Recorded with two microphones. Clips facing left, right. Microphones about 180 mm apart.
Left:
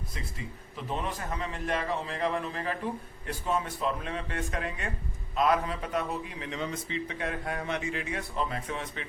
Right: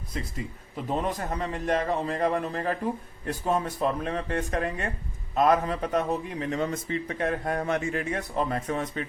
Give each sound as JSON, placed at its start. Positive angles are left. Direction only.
{"t": 0.9, "sound": "a man's voice", "side_deg": -40}